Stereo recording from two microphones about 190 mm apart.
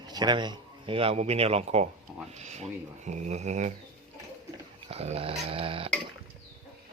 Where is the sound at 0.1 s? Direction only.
20° right (ahead or behind); by 3.7 s 40° right (ahead or behind).